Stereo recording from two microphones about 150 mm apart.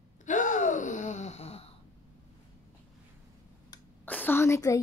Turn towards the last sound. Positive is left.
turn(degrees=20)  # may be behind; listen again after turning